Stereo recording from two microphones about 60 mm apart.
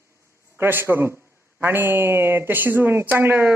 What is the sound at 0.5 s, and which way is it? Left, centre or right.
Speech, right.